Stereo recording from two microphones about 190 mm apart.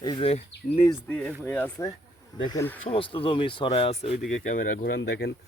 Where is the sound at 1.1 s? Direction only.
5° left (ahead or behind).